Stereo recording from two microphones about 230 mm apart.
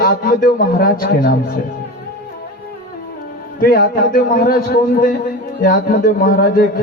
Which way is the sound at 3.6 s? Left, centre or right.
Left.